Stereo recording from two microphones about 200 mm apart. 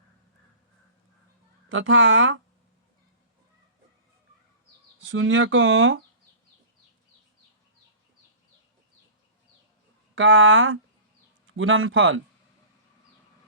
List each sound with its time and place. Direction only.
1.7 s speech: 75° right (ahead or behind)
4.9 s speech: 75° right (ahead or behind)
10.2 s speech: 75° right (ahead or behind)
11.5 s speech: 90° right